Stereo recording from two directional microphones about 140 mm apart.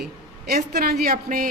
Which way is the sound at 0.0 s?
90° right.